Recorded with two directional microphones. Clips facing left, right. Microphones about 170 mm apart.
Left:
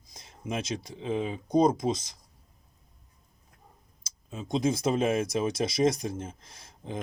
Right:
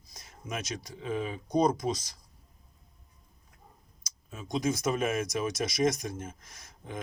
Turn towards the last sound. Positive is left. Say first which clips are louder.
# left 3 dB
turn(degrees=30)  # may be behind; listen again after turning